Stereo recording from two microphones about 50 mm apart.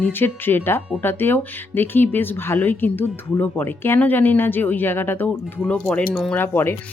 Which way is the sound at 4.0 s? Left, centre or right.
Left.